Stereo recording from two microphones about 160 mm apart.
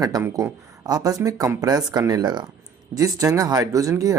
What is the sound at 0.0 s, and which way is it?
Speech, 20° right (ahead or behind).